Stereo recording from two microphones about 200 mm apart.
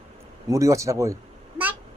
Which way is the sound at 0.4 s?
15° right (ahead or behind).